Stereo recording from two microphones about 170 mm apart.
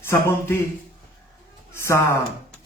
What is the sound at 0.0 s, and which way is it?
Speech, 15° left (ahead or behind).